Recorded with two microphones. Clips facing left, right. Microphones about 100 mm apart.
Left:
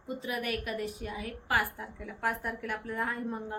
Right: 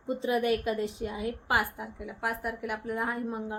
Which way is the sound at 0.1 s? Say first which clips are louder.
Right 7 dB; 30° right (ahead or behind).